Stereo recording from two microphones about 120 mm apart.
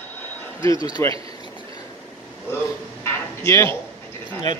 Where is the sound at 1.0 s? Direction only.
20° left (ahead or behind).